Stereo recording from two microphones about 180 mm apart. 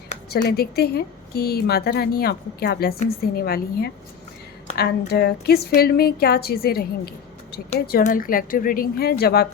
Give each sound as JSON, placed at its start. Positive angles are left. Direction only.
{"t": 0.3, "sound": "a woman's voice", "side_deg": 60}